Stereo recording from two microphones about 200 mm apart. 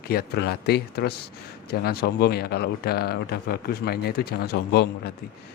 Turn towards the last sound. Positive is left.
turn(degrees=55)  # may be behind; listen again after turning